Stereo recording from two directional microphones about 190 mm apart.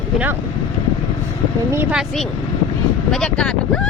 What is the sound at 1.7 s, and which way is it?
Speech, 5° right (ahead or behind).